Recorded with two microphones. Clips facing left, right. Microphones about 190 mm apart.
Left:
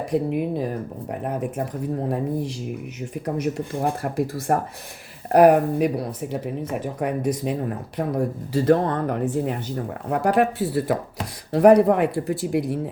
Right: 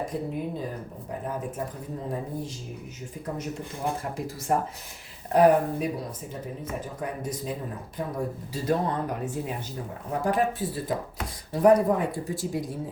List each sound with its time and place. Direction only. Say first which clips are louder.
0.1 s speech: left 8 dB; 70° left (ahead or behind)
8.5 s speech: left 8 dB; 65° left (ahead or behind)
10.1 s speech: left 5 dB; 70° left (ahead or behind)